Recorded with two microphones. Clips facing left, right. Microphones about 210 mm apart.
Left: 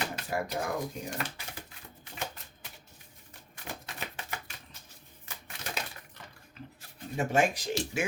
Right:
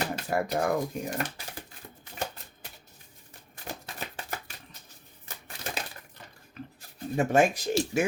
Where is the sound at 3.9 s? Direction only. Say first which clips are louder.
Right 2 dB; 40° right (ahead or behind).